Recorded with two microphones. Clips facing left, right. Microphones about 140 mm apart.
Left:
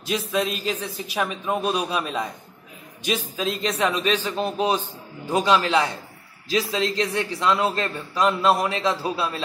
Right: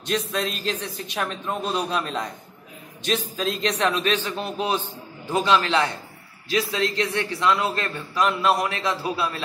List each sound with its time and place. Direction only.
0.3 s a man's voice: 5° left (ahead or behind)
4.3 s a man's voice: 35° left (ahead or behind)
5.3 s a man's voice: 5° left (ahead or behind)
6.5 s a man's voice: 25° left (ahead or behind)